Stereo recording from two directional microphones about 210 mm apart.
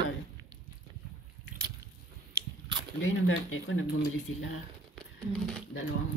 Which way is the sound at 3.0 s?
70° left (ahead or behind).